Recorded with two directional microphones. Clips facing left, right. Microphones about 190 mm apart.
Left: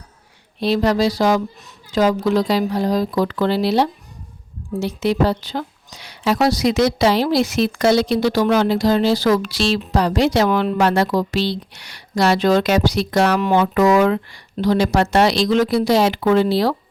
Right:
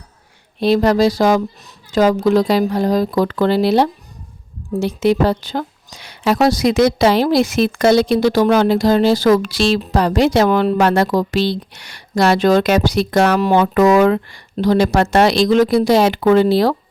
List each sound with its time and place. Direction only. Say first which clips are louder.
0.6 s a woman's voice: right 4 dB; 50° right (ahead or behind)